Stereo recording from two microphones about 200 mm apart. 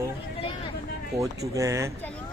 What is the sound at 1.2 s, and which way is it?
Speech, 15° right (ahead or behind).